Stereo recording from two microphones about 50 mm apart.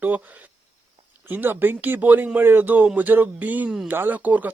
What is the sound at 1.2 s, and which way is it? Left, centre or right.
A man's voice, right.